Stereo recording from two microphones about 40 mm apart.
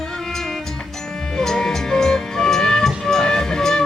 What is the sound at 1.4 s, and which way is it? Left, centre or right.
Music, centre.